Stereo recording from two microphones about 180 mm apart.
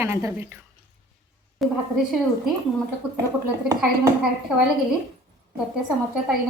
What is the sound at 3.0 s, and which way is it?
Speech, 5° right (ahead or behind).